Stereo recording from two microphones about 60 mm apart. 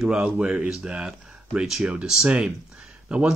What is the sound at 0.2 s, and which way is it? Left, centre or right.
Speech, right.